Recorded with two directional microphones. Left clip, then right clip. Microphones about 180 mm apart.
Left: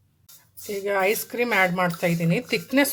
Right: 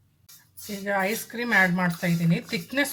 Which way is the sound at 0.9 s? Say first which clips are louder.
Left 5 dB; 40° left (ahead or behind).